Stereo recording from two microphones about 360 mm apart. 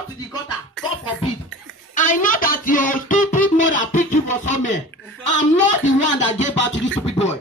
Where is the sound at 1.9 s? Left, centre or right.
Left.